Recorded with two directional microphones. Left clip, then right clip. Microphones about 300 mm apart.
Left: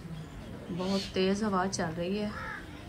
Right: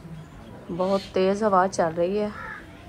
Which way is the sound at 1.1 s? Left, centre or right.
Centre.